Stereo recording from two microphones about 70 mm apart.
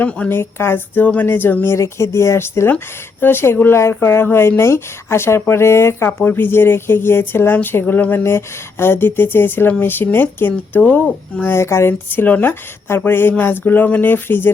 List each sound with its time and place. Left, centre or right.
0.0 s speech: left
1.7 s speech: left
11.5 s speech: left